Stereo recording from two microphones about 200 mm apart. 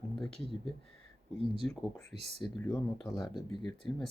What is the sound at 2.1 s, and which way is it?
Speech, 30° right (ahead or behind).